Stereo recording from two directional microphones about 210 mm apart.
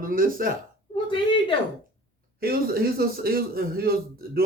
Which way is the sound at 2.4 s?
45° right (ahead or behind).